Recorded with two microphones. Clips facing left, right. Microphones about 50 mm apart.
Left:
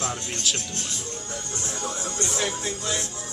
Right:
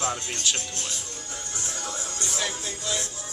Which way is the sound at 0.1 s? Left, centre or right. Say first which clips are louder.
Even; centre.